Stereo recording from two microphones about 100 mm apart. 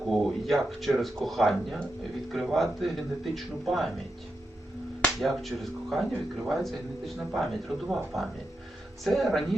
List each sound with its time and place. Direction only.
0.1 s speech: centre (ahead or behind)
5.0 s speech: centre (ahead or behind)